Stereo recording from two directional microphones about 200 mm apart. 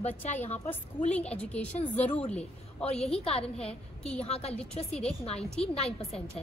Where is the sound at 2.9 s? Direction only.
30° left (ahead or behind).